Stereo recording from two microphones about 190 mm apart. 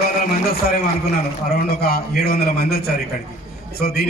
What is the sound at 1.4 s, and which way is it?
A man's voice, 55° left (ahead or behind).